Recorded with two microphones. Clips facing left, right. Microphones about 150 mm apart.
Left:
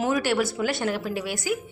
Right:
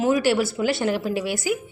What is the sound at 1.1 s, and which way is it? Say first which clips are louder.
Speech: right 3 dB; 10° right (ahead or behind).